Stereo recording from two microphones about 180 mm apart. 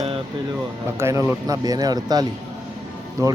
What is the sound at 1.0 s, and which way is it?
Speech, 15° right (ahead or behind).